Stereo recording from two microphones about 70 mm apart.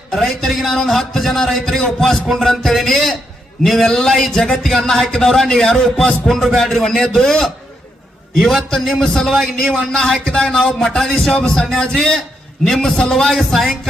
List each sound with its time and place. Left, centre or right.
0.1 s music: centre
9.9 s a man's voice: centre
12.6 s music: centre